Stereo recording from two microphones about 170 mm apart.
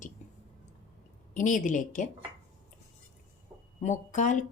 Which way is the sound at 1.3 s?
50° left (ahead or behind).